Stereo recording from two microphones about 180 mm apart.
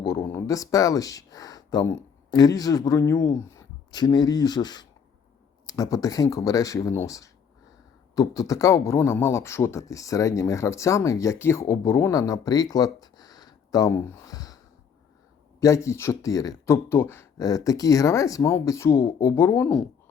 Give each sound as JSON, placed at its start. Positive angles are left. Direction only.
{"t": 0.0, "sound": "speech", "side_deg": 15}
{"t": 15.6, "sound": "speech", "side_deg": 15}